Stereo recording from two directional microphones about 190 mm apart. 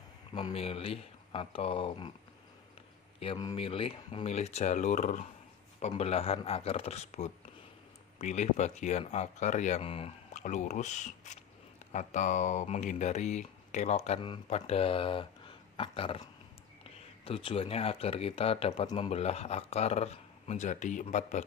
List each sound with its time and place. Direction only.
0.3 s speech: 25° left (ahead or behind)
3.2 s speech: 25° left (ahead or behind)
17.2 s speech: 30° left (ahead or behind)